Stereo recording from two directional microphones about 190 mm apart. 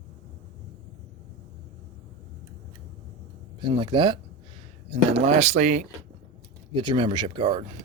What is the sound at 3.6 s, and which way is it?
Speech, 25° right (ahead or behind).